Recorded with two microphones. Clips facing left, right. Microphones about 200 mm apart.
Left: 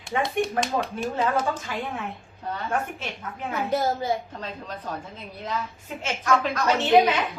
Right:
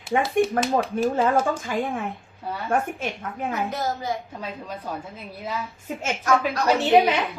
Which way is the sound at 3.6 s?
30° left (ahead or behind).